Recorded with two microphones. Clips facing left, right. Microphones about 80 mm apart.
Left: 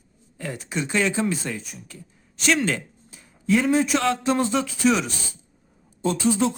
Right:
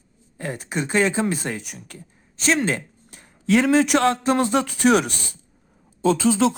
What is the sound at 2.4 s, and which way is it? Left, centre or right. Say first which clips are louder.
Speech: right 1 dB; right.